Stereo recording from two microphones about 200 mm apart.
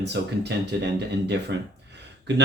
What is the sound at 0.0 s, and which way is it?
Speech, 60° right (ahead or behind).